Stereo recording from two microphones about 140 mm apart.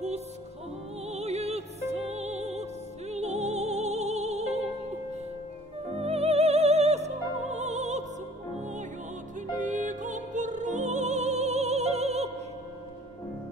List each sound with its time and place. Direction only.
1.0 s music: 50° right (ahead or behind)
5.9 s music: 50° right (ahead or behind)